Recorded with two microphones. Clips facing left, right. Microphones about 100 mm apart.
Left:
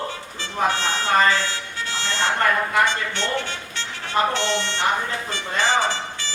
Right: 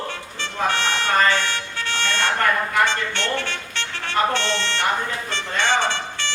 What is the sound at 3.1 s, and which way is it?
Speech, 70° right (ahead or behind).